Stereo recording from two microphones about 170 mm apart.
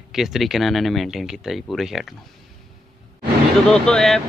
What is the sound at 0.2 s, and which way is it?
Speech, centre (ahead or behind).